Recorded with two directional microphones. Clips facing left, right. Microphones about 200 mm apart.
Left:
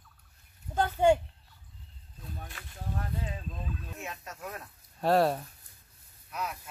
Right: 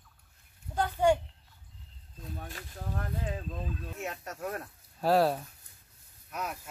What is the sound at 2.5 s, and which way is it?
Boat, 40° right (ahead or behind).